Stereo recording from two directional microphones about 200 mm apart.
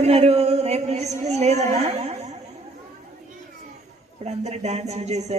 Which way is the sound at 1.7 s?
35° right (ahead or behind).